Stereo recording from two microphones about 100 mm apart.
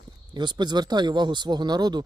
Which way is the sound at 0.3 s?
45° right (ahead or behind).